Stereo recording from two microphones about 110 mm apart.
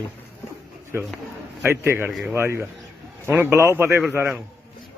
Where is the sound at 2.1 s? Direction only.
Centre (ahead or behind).